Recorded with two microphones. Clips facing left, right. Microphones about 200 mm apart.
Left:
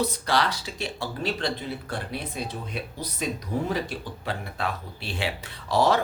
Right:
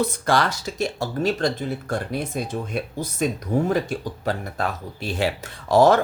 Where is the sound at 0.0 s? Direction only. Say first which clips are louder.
Right 4 dB; 45° right (ahead or behind).